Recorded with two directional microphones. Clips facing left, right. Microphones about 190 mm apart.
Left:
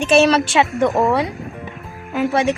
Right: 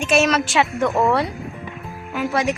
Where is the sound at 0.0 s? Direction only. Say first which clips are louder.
Left 4 dB; 30° left (ahead or behind); by 1.3 s 15° left (ahead or behind).